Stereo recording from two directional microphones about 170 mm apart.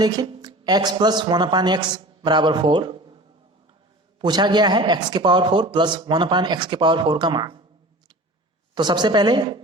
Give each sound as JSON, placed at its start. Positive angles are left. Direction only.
{"t": 0.0, "sound": "a man's voice", "side_deg": -25}
{"t": 4.2, "sound": "a man's voice", "side_deg": -25}
{"t": 8.7, "sound": "a man's voice", "side_deg": -25}